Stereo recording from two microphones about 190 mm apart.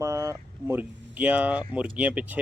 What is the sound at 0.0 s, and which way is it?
A man's voice, 15° right (ahead or behind).